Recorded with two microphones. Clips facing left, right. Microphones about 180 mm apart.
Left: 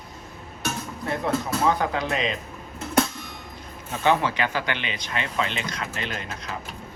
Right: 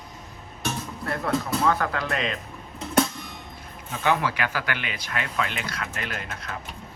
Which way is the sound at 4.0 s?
20° left (ahead or behind).